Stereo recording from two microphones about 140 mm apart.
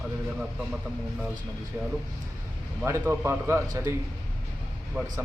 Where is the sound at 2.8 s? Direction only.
20° right (ahead or behind).